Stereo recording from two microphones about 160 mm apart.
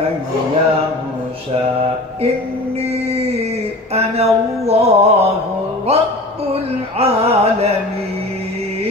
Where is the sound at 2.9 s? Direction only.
40° right (ahead or behind).